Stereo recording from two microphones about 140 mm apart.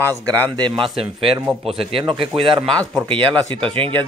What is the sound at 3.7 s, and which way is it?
Speech, 40° right (ahead or behind).